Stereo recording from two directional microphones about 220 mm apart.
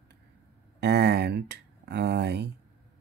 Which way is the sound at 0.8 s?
50° right (ahead or behind).